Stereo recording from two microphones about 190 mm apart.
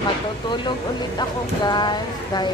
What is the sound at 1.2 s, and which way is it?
Speech, 20° left (ahead or behind).